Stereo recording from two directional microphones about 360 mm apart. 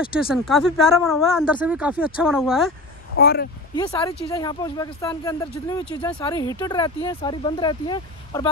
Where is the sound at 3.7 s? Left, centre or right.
Centre.